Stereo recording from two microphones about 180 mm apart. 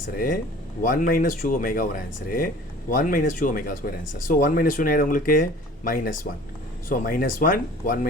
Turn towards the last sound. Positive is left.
turn(degrees=50)  # may be behind; listen again after turning